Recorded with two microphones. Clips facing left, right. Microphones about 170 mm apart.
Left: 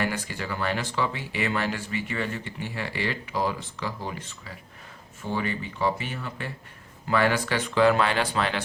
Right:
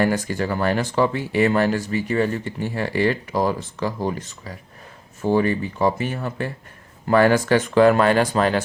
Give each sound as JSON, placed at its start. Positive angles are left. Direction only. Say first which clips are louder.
{"t": 0.0, "sound": "speech", "louder": "right 9 dB", "side_deg": -45}